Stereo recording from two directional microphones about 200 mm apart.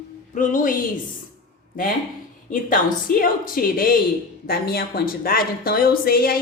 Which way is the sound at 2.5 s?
45° left (ahead or behind).